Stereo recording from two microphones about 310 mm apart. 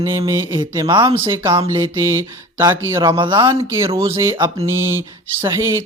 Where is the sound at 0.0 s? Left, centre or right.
Centre.